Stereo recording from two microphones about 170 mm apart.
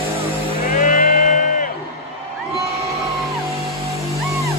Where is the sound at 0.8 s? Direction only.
55° left (ahead or behind).